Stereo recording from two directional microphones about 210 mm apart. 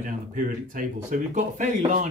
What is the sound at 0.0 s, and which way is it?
Speech, 40° right (ahead or behind).